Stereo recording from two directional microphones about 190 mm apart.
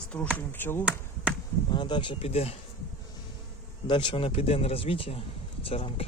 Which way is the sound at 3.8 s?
25° left (ahead or behind).